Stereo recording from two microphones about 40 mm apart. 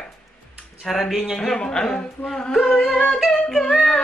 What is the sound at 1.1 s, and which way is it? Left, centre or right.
Speech, centre.